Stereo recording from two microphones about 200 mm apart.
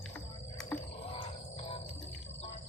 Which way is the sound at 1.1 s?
30° left (ahead or behind).